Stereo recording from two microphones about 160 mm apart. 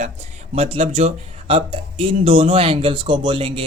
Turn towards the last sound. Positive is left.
turn(degrees=-30)  # may be behind; listen again after turning